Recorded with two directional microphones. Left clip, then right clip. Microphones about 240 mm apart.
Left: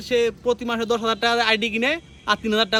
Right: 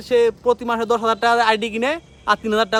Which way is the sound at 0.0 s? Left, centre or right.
Centre.